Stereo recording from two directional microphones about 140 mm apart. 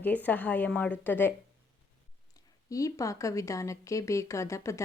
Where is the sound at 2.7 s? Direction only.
25° left (ahead or behind).